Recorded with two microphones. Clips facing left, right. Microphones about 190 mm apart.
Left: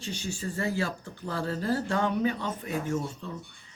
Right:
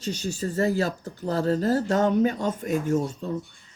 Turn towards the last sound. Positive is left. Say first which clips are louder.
# right 6 dB
turn(degrees=-40)  # may be behind; listen again after turning